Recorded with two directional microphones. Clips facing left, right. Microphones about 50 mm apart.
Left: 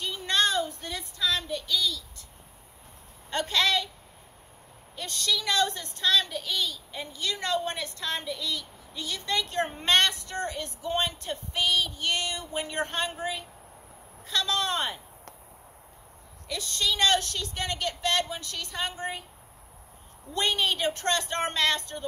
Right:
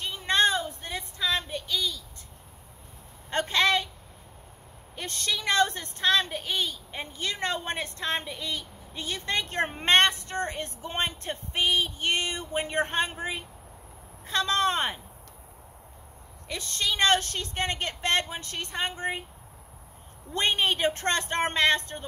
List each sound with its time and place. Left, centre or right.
0.0 s child singing: right
3.3 s speech: right
4.9 s a woman's voice: right
16.4 s a woman's voice: right
20.3 s a woman's voice: right